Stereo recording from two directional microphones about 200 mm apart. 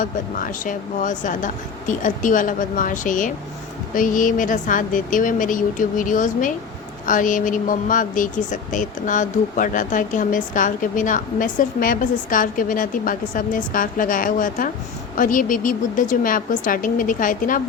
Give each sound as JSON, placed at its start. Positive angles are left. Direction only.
{"t": 0.0, "sound": "a woman's voice", "side_deg": 40}